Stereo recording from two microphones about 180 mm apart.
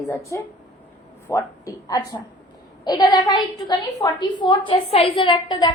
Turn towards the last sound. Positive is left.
turn(degrees=25)  # may be behind; listen again after turning